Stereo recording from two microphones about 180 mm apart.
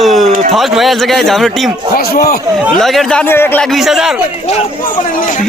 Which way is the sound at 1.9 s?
55° left (ahead or behind).